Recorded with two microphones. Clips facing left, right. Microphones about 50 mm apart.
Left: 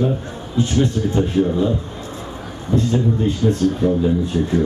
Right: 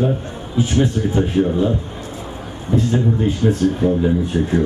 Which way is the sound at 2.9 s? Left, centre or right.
Right.